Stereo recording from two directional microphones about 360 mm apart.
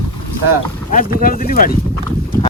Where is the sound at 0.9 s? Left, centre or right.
Left.